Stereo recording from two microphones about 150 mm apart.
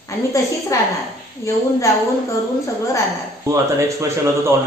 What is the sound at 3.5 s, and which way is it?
Speech, 20° right (ahead or behind).